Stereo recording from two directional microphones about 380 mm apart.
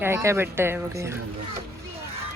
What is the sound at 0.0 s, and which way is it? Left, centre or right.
Speech, centre.